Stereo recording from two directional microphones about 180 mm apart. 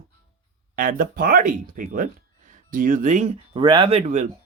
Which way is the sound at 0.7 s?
50° right (ahead or behind).